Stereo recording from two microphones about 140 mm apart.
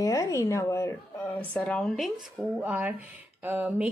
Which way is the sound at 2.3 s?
10° right (ahead or behind).